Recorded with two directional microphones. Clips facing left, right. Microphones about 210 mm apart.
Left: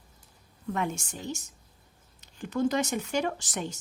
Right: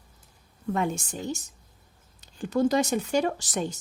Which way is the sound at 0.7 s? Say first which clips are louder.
Right 4 dB; 35° right (ahead or behind).